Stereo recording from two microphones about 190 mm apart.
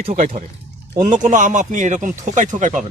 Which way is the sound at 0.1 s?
45° right (ahead or behind).